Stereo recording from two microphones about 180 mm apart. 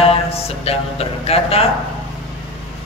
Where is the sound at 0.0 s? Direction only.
35° left (ahead or behind).